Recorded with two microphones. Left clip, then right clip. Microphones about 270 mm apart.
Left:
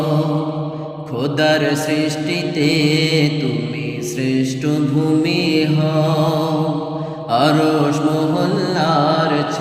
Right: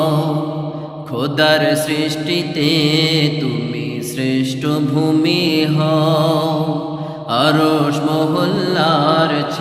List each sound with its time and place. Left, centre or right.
1.2 s mantra: centre